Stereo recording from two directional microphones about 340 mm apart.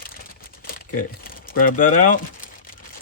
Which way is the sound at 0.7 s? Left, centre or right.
Left.